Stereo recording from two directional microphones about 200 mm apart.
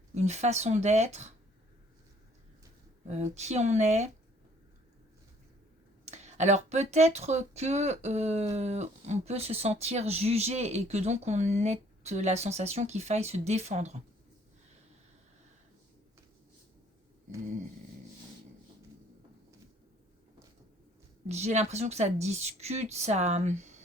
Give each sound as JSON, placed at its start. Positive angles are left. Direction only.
{"t": 0.1, "sound": "speech", "side_deg": -35}
{"t": 3.3, "sound": "speech", "side_deg": -35}
{"t": 6.1, "sound": "speech", "side_deg": -35}
{"t": 21.2, "sound": "speech", "side_deg": -35}